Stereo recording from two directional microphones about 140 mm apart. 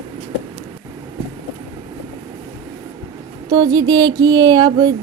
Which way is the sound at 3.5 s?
30° right (ahead or behind).